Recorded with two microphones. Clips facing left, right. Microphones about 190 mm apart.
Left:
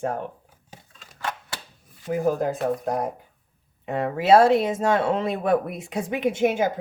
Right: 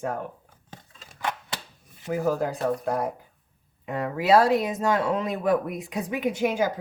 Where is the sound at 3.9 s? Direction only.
25° left (ahead or behind).